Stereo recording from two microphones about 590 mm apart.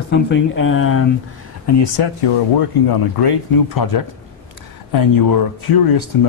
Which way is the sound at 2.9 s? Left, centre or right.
Left.